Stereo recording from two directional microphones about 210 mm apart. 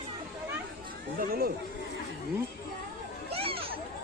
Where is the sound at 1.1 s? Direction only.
45° right (ahead or behind).